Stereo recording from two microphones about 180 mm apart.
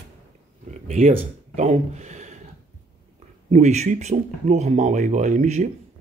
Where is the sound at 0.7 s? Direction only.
45° right (ahead or behind).